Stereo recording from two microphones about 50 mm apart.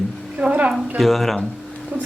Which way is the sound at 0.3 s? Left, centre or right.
Right.